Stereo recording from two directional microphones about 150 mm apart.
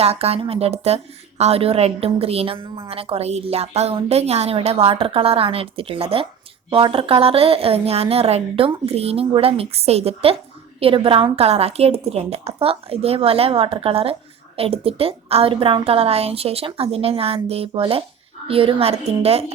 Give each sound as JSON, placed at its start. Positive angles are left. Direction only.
{"t": 0.0, "sound": "a woman's voice", "side_deg": -45}